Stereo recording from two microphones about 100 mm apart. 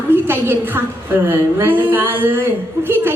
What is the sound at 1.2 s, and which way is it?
A woman's voice, 25° right (ahead or behind).